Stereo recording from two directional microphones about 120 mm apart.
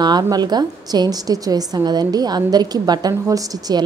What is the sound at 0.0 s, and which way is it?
A woman's voice, 35° right (ahead or behind).